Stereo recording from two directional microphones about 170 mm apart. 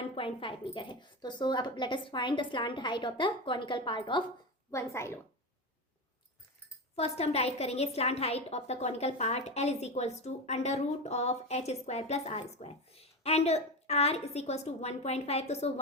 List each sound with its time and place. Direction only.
0.2 s a woman's voice: 30° left (ahead or behind)
4.7 s a woman's voice: 15° left (ahead or behind)
6.9 s a woman's voice: 35° left (ahead or behind)